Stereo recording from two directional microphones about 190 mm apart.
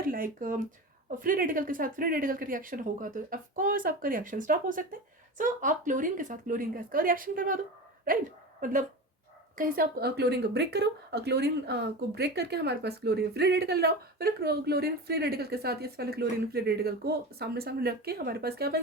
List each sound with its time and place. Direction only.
0.0 s speech: 50° right (ahead or behind)
8.6 s speech: 45° right (ahead or behind)